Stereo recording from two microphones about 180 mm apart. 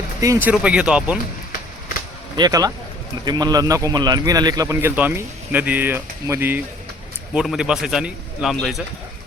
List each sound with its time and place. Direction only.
0.2 s a man's voice: 15° right (ahead or behind)
2.3 s a man's voice: 20° right (ahead or behind); by 8.8 s centre (ahead or behind)